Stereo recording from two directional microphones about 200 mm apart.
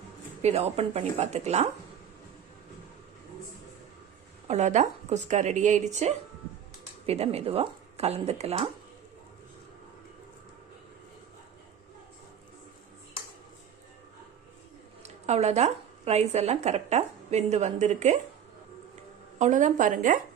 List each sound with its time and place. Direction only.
0.4 s speech: 30° right (ahead or behind)
4.4 s speech: 35° right (ahead or behind)
15.0 s speech: 35° right (ahead or behind)
19.4 s speech: 40° right (ahead or behind)